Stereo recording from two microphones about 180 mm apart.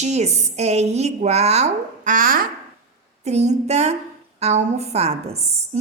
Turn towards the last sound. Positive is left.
turn(degrees=-35)  # may be behind; listen again after turning